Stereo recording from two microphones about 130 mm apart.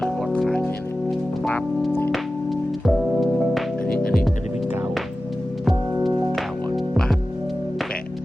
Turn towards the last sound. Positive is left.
turn(degrees=5)  # may be behind; listen again after turning